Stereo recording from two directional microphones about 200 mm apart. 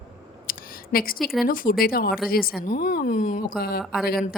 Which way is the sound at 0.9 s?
50° left (ahead or behind).